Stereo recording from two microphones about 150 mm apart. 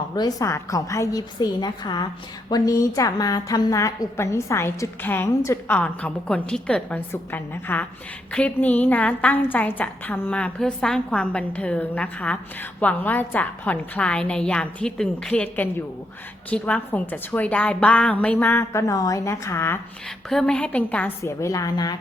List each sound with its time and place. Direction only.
0.2 s a woman's voice: 25° left (ahead or behind)
20.3 s a woman's voice: 5° left (ahead or behind); by 21.9 s 25° left (ahead or behind)